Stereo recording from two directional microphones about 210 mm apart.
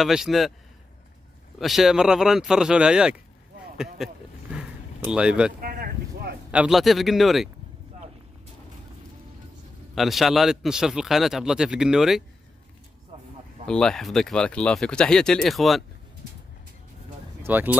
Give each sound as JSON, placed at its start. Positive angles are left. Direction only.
{"t": 0.0, "sound": "a man's voice", "side_deg": 0}
{"t": 1.6, "sound": "a man's voice", "side_deg": 0}
{"t": 3.7, "sound": "a sound", "side_deg": 0}
{"t": 5.6, "sound": "a sound", "side_deg": -45}
{"t": 6.5, "sound": "a man's voice", "side_deg": -5}
{"t": 9.9, "sound": "a man's voice", "side_deg": 0}
{"t": 13.7, "sound": "a man's voice", "side_deg": 5}
{"t": 17.4, "sound": "speech", "side_deg": -10}